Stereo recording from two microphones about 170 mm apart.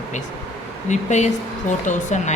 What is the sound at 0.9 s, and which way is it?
A woman's voice, 45° left (ahead or behind).